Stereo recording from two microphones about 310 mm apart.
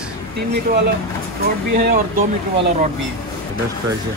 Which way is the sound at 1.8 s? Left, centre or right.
Right.